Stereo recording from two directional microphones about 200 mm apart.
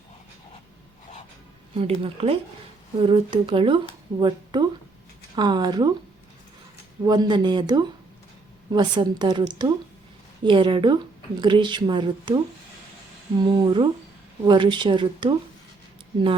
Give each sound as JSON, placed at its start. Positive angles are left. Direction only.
{"t": 1.7, "sound": "a woman's voice", "side_deg": -30}
{"t": 7.0, "sound": "a woman's voice", "side_deg": -20}
{"t": 13.5, "sound": "a woman's voice", "side_deg": -25}